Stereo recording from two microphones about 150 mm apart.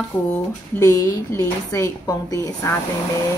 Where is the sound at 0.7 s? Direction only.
20° left (ahead or behind).